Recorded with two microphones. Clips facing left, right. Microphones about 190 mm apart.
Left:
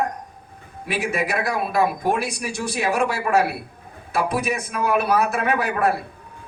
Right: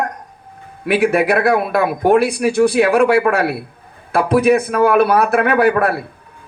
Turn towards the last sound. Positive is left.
turn(degrees=-60)  # may be behind; listen again after turning